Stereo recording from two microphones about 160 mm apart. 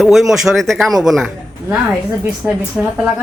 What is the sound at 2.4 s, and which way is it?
Speech, 15° right (ahead or behind).